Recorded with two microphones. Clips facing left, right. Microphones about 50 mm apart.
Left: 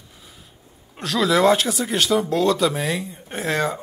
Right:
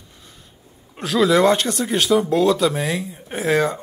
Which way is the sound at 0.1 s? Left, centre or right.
Centre.